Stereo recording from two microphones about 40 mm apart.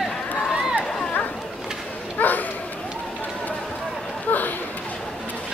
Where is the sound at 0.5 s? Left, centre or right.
Centre.